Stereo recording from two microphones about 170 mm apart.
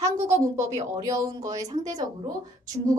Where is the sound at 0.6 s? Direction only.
20° right (ahead or behind).